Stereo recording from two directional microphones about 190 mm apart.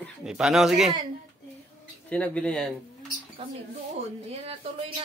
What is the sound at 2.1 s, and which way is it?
Speech, 5° left (ahead or behind).